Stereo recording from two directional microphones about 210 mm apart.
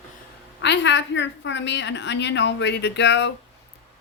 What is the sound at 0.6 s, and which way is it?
A woman's voice, 55° left (ahead or behind).